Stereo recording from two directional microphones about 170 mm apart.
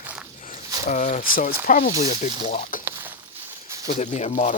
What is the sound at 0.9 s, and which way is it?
Speech, 45° left (ahead or behind).